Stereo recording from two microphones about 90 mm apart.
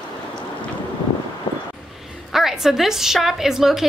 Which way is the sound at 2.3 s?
5° right (ahead or behind).